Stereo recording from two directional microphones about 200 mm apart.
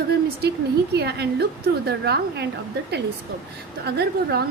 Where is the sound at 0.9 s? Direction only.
55° right (ahead or behind).